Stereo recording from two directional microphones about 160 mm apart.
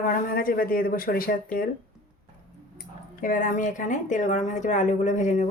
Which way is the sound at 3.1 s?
55° left (ahead or behind).